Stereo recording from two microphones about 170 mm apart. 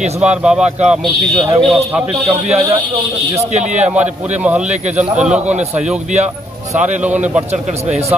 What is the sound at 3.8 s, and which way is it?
A man's voice, 10° right (ahead or behind).